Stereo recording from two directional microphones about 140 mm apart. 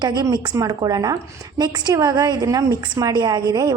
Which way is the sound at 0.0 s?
30° right (ahead or behind).